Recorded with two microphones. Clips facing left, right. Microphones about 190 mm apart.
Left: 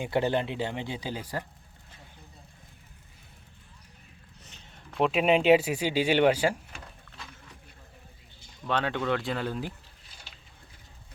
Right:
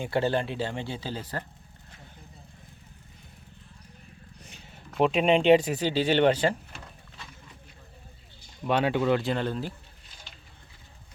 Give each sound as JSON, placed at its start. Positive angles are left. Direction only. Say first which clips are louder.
{"t": 0.0, "sound": "speech", "louder": "even", "side_deg": 15}
{"t": 4.4, "sound": "speech", "louder": "right 1 dB", "side_deg": -5}
{"t": 8.6, "sound": "speech", "louder": "right 4 dB", "side_deg": -10}